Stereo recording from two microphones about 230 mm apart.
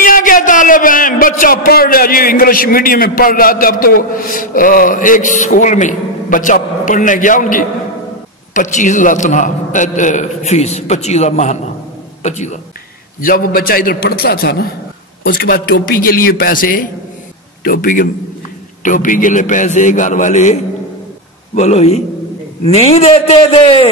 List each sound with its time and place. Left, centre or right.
0.0 s a man's voice: left
21.5 s a man's voice: left